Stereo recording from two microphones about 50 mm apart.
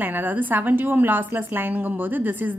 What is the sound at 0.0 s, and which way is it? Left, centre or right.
A woman's voice, right.